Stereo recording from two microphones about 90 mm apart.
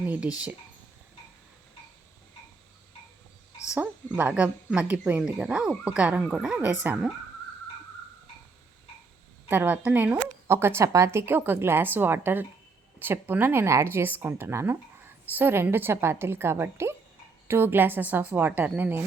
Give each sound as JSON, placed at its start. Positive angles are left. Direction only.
{"t": 0.0, "sound": "speech", "side_deg": -15}
{"t": 3.8, "sound": "speech", "side_deg": -15}
{"t": 9.5, "sound": "a woman's voice", "side_deg": -20}
{"t": 10.5, "sound": "a woman's voice", "side_deg": -30}